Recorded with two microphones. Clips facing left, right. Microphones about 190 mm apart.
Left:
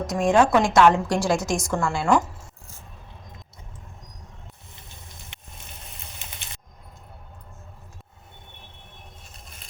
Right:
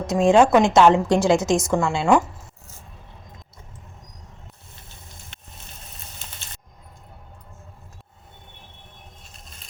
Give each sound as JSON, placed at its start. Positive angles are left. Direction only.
{"t": 0.1, "sound": "a woman's voice", "side_deg": -25}